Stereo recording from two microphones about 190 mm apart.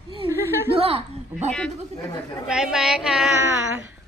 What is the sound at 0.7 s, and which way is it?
Speech, 30° right (ahead or behind).